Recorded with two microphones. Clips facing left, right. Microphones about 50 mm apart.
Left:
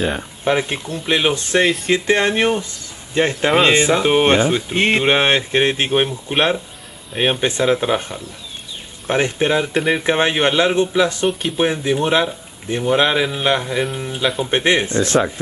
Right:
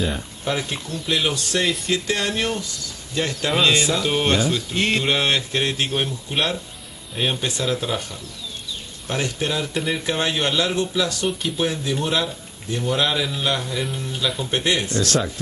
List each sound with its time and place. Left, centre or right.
0.5 s speech: left
13.9 s speech: left
14.5 s speech: left